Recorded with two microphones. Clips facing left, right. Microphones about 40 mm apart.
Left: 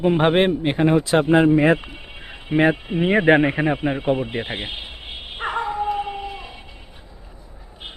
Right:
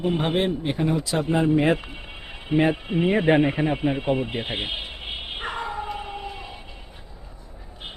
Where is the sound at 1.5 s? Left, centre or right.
Centre.